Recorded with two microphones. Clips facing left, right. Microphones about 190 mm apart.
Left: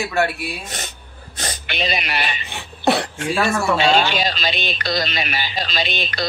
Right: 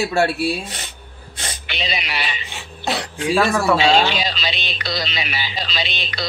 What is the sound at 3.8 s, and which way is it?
Speech, 50° left (ahead or behind).